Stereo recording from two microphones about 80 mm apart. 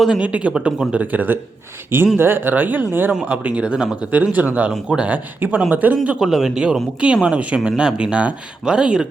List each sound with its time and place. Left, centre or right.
0.2 s speech: centre
6.1 s speech: centre